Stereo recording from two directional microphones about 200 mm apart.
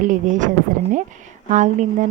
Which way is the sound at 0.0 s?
40° right (ahead or behind).